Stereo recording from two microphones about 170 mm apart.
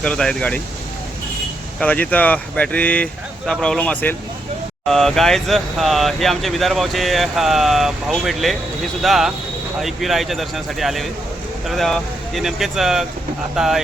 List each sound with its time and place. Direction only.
0.0 s speech: 5° left (ahead or behind)
1.8 s speech: 10° left (ahead or behind)